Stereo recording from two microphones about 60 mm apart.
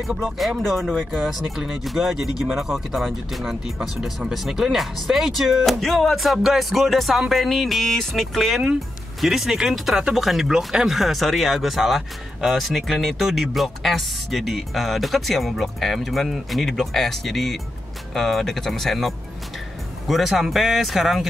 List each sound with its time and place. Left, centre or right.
0.1 s speech: centre